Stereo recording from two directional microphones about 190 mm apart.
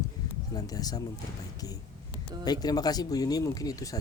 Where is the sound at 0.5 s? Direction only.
20° left (ahead or behind).